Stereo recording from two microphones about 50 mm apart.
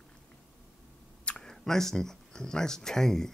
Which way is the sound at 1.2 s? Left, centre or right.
Left.